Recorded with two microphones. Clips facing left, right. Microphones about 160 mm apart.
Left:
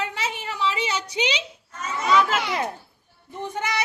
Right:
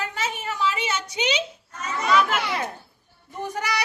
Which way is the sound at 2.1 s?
25° left (ahead or behind).